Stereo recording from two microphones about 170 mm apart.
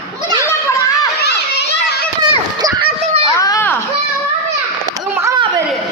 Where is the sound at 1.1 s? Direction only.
75° left (ahead or behind).